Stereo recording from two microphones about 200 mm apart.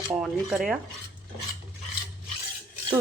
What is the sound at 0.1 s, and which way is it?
Dishes, 5° right (ahead or behind).